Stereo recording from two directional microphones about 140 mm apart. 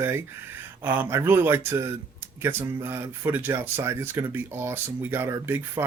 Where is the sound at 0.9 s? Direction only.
15° right (ahead or behind).